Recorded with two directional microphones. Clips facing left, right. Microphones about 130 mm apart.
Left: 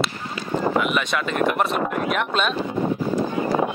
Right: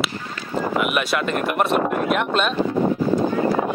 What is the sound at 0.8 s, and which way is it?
A man's voice, 5° right (ahead or behind).